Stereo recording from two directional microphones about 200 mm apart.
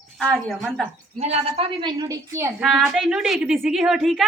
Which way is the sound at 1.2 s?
30° right (ahead or behind).